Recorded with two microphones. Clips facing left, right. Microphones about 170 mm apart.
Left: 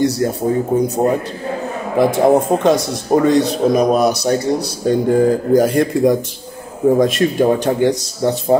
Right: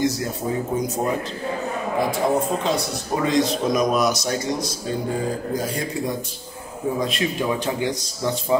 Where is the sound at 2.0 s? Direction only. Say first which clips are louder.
Left 9 dB; 65° left (ahead or behind).